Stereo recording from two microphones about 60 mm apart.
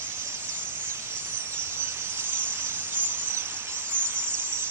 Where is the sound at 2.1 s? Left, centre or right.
Right.